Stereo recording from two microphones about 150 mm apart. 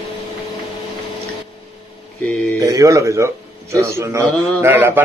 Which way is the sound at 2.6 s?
20° right (ahead or behind).